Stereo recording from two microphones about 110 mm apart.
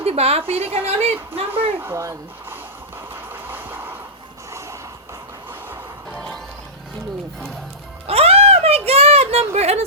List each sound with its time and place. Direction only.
0.0 s a woman's voice: 65° right (ahead or behind)
1.8 s speech: 25° right (ahead or behind)
3.4 s vehicle: 20° right (ahead or behind)
6.1 s music: 5° left (ahead or behind)
8.0 s a sound: 65° right (ahead or behind)